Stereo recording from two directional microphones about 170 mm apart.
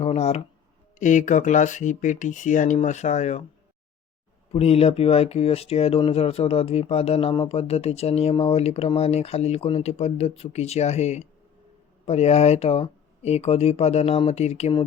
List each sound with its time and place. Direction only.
0.0 s a sound: 40° left (ahead or behind)
0.9 s speech: 45° left (ahead or behind)
4.5 s speech: 35° left (ahead or behind)